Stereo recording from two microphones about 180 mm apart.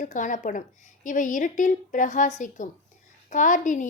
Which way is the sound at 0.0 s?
45° left (ahead or behind).